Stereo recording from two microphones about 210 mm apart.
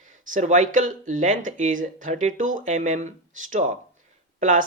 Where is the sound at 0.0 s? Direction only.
35° right (ahead or behind).